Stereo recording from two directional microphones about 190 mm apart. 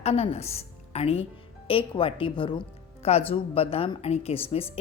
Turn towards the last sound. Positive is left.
turn(degrees=30)  # may be behind; listen again after turning